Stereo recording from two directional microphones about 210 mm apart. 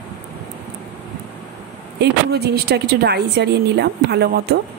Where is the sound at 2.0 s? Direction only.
50° right (ahead or behind).